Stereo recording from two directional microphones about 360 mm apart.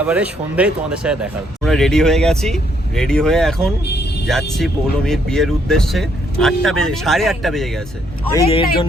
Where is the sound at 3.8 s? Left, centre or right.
Left.